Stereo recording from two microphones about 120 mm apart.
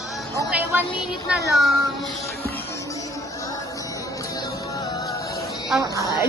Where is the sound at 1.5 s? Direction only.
Centre (ahead or behind).